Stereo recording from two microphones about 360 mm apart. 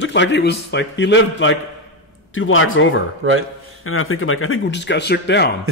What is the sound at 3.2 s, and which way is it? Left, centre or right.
Speech, right.